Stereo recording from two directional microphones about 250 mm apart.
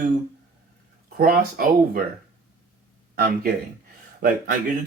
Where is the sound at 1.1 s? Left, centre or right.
Right.